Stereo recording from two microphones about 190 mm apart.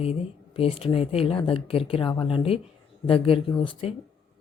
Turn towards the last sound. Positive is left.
turn(degrees=30)  # may be behind; listen again after turning